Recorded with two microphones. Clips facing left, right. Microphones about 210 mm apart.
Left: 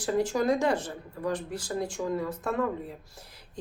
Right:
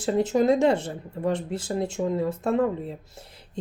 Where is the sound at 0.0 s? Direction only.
20° right (ahead or behind).